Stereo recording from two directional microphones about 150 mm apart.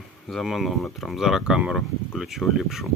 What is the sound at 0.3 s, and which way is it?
Speech, centre (ahead or behind).